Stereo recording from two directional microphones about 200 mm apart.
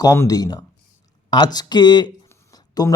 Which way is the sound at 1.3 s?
20° left (ahead or behind).